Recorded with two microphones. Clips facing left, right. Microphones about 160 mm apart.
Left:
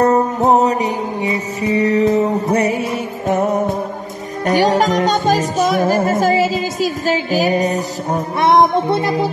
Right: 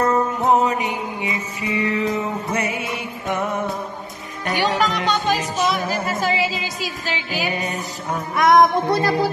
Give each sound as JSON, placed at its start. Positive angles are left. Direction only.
{"t": 0.0, "sound": "music", "side_deg": 40}